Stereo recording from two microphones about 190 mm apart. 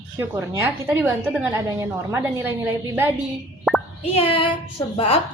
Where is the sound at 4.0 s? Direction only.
30° left (ahead or behind).